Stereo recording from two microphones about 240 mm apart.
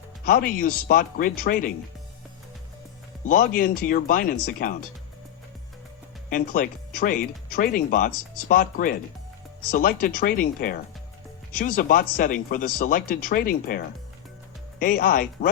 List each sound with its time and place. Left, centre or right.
0.3 s speech: left
3.2 s speech: left
6.3 s speech: left